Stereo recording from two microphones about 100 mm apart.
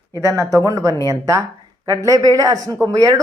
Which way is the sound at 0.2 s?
35° right (ahead or behind).